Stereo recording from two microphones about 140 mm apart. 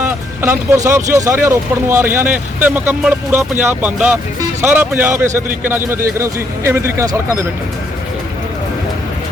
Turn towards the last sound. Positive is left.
turn(degrees=-20)  # may be behind; listen again after turning